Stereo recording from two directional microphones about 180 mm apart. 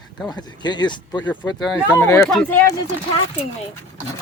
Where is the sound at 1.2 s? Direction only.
5° left (ahead or behind).